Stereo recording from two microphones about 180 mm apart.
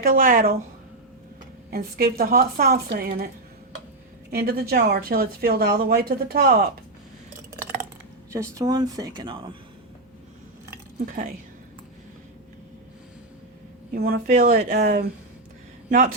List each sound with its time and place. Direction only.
0.0 s a woman's voice: 50° right (ahead or behind)
1.7 s speech: 60° right (ahead or behind)
4.3 s speech: 55° right (ahead or behind)
8.3 s speech: 15° right (ahead or behind)
11.0 s a woman's voice: 45° right (ahead or behind)
13.9 s speech: 60° right (ahead or behind)
14.3 s speech: 40° right (ahead or behind)
14.6 s a woman's voice: 55° right (ahead or behind)